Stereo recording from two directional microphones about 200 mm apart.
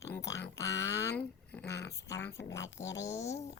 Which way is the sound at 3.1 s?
15° left (ahead or behind).